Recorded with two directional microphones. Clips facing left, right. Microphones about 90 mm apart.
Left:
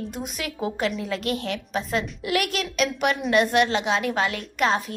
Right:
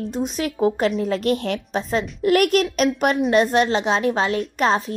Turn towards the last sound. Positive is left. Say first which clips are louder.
# right 3 dB
turn(degrees=-35)  # may be behind; listen again after turning